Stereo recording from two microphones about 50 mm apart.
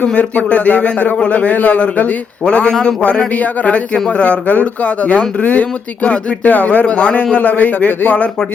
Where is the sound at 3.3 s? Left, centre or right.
Left.